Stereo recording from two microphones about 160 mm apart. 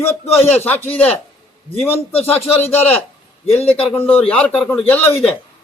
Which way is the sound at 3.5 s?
40° left (ahead or behind).